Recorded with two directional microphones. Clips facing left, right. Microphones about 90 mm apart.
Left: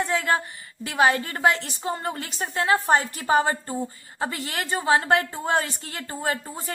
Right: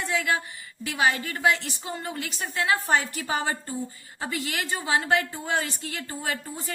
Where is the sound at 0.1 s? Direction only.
40° left (ahead or behind).